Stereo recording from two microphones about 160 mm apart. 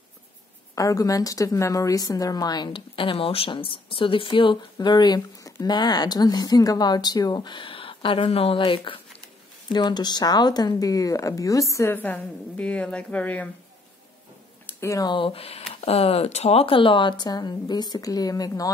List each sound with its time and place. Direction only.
0.7 s a woman's voice: 20° left (ahead or behind)
14.7 s a woman's voice: 20° left (ahead or behind)